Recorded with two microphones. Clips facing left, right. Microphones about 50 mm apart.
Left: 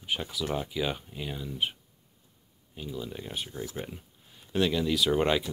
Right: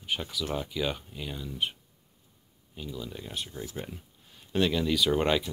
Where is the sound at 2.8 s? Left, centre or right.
Centre.